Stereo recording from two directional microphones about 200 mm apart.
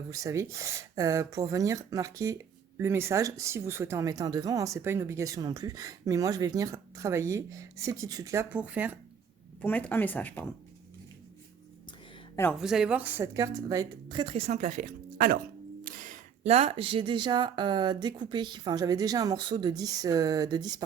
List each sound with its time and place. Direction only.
0.1 s a woman's voice: 15° right (ahead or behind)
9.6 s speech: 5° left (ahead or behind)
12.5 s speech: centre (ahead or behind); by 20.8 s 20° right (ahead or behind)